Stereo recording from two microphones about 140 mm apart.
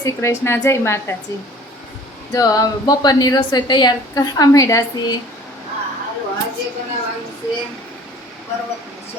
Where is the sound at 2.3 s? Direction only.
25° left (ahead or behind).